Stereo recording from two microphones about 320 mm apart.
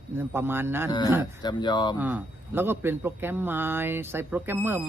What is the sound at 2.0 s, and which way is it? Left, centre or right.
A man's voice, centre.